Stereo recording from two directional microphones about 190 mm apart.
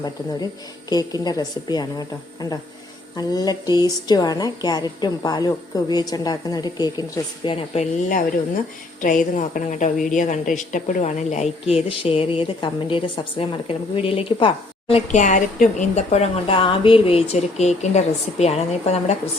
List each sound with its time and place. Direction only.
0.9 s a woman's voice: 20° left (ahead or behind)